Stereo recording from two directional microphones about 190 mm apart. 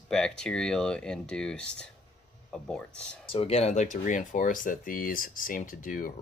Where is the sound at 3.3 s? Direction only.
30° left (ahead or behind).